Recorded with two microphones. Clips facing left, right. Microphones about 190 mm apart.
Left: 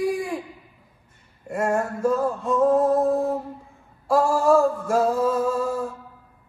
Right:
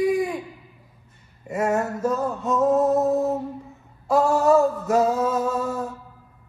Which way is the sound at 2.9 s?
20° right (ahead or behind).